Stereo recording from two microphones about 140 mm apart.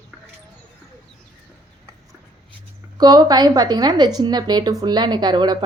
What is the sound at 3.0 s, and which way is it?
A woman's voice, 30° right (ahead or behind).